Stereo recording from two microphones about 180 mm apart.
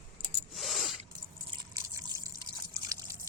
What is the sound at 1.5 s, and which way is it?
Drip, 20° right (ahead or behind).